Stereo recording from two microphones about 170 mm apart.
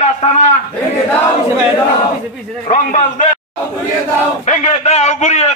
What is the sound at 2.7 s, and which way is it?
Speech, 45° left (ahead or behind).